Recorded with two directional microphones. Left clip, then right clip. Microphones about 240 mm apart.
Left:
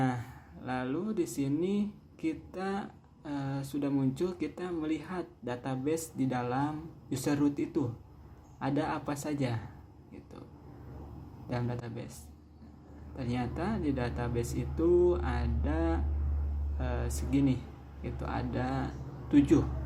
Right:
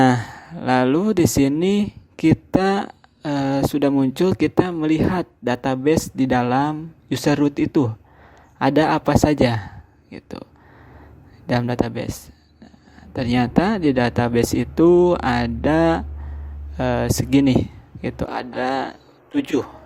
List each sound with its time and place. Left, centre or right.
0.0 s speech: right
11.4 s speech: right
13.1 s speech: right